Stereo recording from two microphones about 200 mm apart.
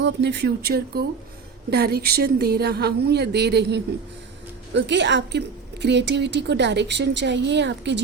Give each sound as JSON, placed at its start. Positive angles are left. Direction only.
{"t": 0.0, "sound": "a woman's voice", "side_deg": -60}